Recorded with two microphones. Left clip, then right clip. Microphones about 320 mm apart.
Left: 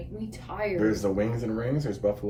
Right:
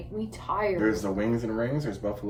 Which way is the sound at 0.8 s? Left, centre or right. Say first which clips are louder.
Left 1 dB; centre.